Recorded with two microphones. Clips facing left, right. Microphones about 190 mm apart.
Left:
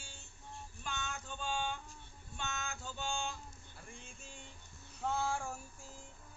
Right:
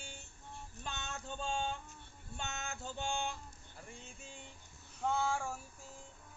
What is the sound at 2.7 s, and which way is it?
Speech, 20° right (ahead or behind).